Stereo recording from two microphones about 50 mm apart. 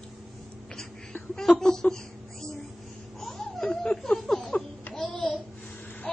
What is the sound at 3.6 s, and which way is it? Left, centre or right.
Chuckle, centre.